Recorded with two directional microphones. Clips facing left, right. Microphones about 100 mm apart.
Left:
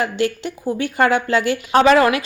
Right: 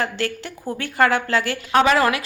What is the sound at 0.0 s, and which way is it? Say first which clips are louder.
A woman's voice: left 4 dB; 15° left (ahead or behind).